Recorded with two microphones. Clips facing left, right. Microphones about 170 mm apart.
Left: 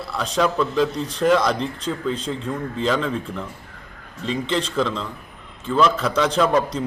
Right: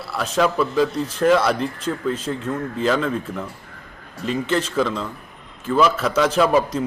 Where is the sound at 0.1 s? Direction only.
5° right (ahead or behind).